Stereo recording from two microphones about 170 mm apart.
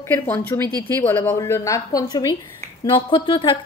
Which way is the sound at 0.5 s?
20° left (ahead or behind).